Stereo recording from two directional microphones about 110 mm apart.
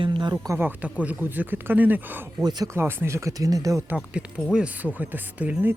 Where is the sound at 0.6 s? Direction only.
15° right (ahead or behind).